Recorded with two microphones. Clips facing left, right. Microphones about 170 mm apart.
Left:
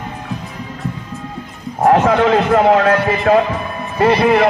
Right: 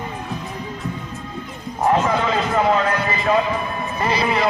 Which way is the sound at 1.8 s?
70° left (ahead or behind).